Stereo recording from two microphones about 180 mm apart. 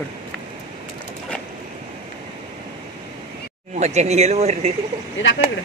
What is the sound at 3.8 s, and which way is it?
Speech, 40° right (ahead or behind).